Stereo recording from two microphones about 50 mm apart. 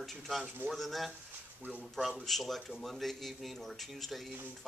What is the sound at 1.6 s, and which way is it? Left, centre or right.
Speech, right.